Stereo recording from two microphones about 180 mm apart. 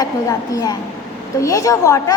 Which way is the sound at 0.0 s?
20° left (ahead or behind).